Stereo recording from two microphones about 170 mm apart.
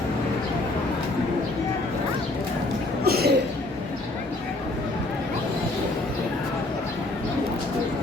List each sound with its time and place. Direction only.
3.0 s chuckle: 65° right (ahead or behind)